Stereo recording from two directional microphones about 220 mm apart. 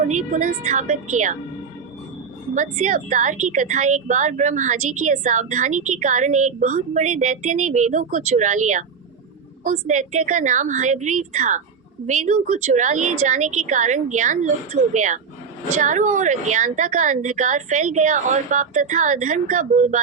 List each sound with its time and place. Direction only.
0.1 s a woman's voice: 35° right (ahead or behind)
2.6 s a woman's voice: 35° right (ahead or behind)